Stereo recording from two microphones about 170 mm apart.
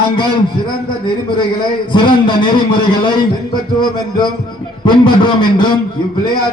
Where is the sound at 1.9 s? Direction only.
30° left (ahead or behind).